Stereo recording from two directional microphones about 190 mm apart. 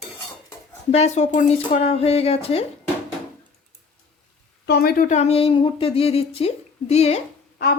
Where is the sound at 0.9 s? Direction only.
35° left (ahead or behind).